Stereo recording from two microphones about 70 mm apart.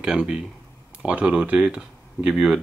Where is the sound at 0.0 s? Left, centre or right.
Centre.